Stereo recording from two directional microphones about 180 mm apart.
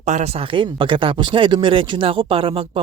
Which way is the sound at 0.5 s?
25° right (ahead or behind).